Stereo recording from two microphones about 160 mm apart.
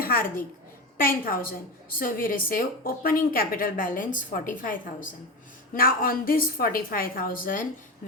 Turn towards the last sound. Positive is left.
turn(degrees=60)  # may be behind; listen again after turning